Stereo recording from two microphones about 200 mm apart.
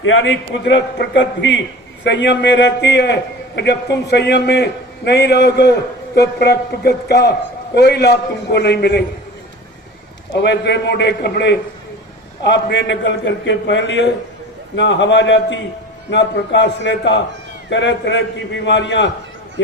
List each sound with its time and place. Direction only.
0.0 s a man's voice: 70° left (ahead or behind)
10.3 s a man's voice: 60° left (ahead or behind)